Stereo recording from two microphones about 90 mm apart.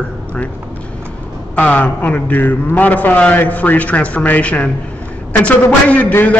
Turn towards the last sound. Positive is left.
turn(degrees=15)  # may be behind; listen again after turning